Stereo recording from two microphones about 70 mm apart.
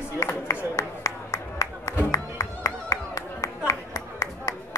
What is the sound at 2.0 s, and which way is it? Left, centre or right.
Music, left.